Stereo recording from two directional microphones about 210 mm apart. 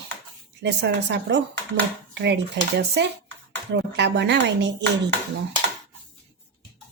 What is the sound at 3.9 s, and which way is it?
Speech, 55° right (ahead or behind).